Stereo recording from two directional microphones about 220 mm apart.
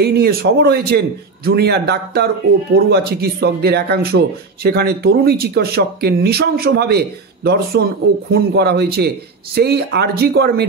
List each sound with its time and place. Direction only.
0.0 s speech: 45° right (ahead or behind)